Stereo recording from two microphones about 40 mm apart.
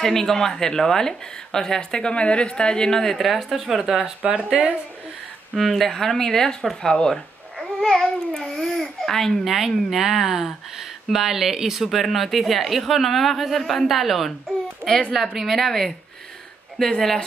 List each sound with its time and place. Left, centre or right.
0.0 s speech: centre
4.5 s a woman's voice: right
5.5 s speech: centre
7.8 s babbling: centre
8.8 s speech: centre
9.4 s speech: centre
11.9 s speech: centre
14.8 s a woman's voice: left
15.3 s speech: centre